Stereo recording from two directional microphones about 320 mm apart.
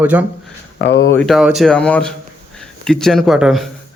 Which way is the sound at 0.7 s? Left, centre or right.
Left.